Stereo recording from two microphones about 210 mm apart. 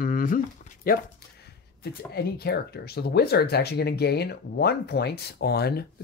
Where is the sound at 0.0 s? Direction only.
40° left (ahead or behind).